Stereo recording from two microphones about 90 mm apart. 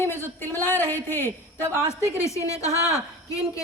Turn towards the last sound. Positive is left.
turn(degrees=40)  # may be behind; listen again after turning